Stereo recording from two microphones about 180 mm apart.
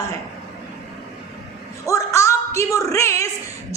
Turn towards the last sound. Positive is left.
turn(degrees=15)  # may be behind; listen again after turning